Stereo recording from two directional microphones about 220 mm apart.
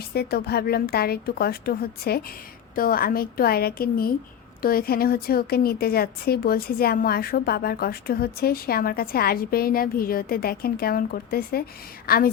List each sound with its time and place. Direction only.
0.1 s a woman's voice: 45° left (ahead or behind)